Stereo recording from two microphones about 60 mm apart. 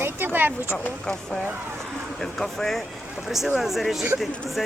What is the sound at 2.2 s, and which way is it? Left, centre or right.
Speech, centre.